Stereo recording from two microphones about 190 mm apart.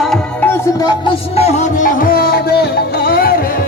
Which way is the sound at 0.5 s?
20° left (ahead or behind).